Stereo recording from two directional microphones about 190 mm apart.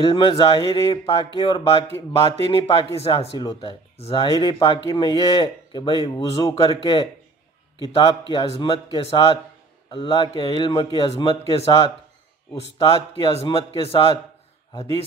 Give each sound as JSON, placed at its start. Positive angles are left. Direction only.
{"t": 0.0, "sound": "speech", "side_deg": 30}